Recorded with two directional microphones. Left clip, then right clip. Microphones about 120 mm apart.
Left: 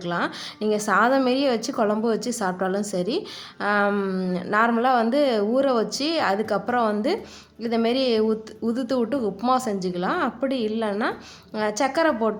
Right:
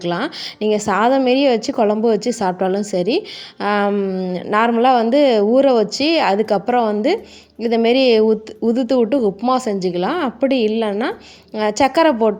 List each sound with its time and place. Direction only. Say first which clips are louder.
0.0 s a woman's voice: right 5 dB; 40° right (ahead or behind)
3.8 s speech: right 5 dB; 25° right (ahead or behind)
4.8 s a woman's voice: right 7 dB; 40° right (ahead or behind)